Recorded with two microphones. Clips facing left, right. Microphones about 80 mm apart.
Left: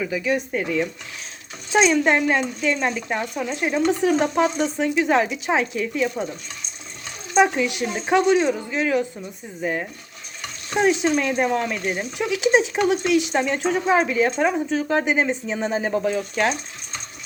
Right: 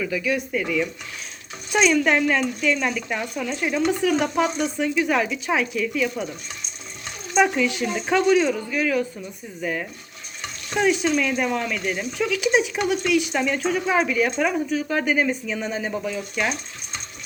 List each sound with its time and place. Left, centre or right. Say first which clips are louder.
0.0 s speech: left 1 dB; left
0.5 s speech: left 1 dB; left
1.7 s speech: left 1 dB; left
7.3 s speech: left 1 dB; left
11.1 s speech: left 2 dB; left
13.3 s speech: left 1 dB; left